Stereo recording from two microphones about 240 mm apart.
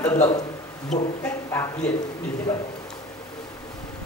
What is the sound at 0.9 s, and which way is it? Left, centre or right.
Speech, centre.